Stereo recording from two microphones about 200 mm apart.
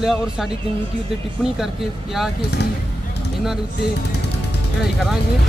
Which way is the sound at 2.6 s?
55° left (ahead or behind).